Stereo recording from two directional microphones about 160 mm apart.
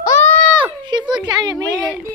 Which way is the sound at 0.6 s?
30° right (ahead or behind).